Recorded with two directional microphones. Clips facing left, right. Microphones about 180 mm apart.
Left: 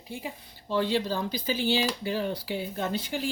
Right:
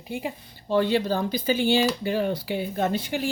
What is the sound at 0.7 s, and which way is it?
Speech, 60° right (ahead or behind).